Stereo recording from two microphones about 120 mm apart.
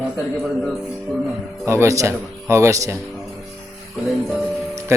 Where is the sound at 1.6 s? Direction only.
25° right (ahead or behind).